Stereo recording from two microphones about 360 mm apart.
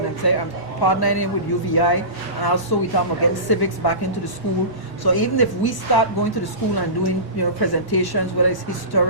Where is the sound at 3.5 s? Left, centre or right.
Left.